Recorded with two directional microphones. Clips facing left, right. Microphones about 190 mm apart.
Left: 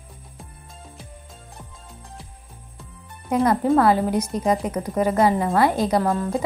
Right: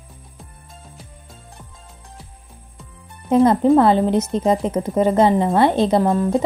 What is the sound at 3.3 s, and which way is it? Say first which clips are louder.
A woman's voice: right 5 dB; 25° right (ahead or behind).